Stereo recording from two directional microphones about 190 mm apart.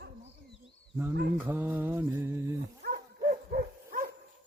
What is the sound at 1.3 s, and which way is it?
Mantra, 10° right (ahead or behind).